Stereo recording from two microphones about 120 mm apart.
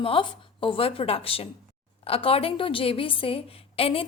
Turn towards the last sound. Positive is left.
turn(degrees=50)  # may be behind; listen again after turning